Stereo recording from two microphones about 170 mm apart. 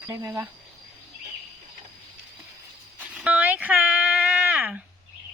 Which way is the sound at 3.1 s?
5° right (ahead or behind).